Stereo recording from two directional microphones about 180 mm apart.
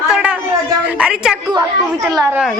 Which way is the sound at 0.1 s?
5° right (ahead or behind).